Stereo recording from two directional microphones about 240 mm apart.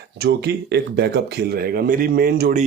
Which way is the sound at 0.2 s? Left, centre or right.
Right.